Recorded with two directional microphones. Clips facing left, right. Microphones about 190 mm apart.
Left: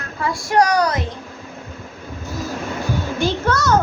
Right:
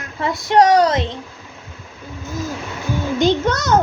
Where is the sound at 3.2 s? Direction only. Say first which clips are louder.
Right 3 dB; 20° right (ahead or behind).